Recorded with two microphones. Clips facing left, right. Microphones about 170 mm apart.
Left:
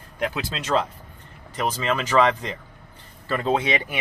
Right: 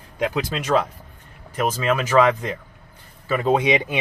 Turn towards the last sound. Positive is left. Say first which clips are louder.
# right 4 dB
turn(degrees=-15)  # may be behind; listen again after turning